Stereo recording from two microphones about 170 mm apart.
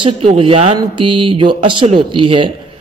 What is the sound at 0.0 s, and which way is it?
A man's voice, 35° right (ahead or behind).